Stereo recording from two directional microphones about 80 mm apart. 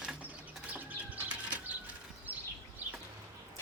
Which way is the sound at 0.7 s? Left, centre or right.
Right.